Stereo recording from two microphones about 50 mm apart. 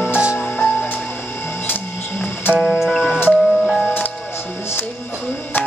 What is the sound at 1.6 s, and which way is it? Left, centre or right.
Music, left.